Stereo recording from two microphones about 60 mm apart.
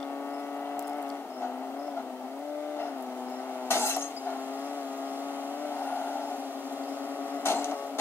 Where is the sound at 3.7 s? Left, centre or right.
Left.